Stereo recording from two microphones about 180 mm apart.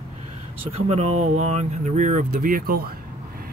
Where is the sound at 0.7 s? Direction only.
35° right (ahead or behind).